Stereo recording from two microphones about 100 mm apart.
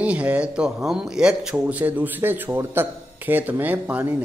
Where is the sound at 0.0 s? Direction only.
15° right (ahead or behind).